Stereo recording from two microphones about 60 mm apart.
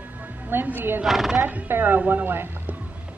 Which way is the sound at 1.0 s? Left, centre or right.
Centre.